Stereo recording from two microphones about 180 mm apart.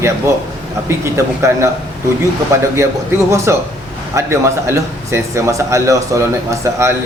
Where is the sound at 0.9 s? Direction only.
15° right (ahead or behind).